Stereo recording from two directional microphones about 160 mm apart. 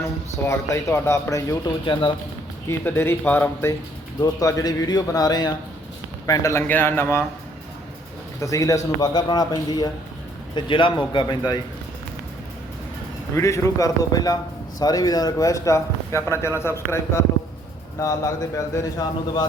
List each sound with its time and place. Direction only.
0.4 s speech: 15° left (ahead or behind)
1.8 s speech: 30° left (ahead or behind)
2.6 s a man's voice: 15° left (ahead or behind)
8.4 s a man's voice: 20° left (ahead or behind)
13.3 s a man's voice: 20° left (ahead or behind)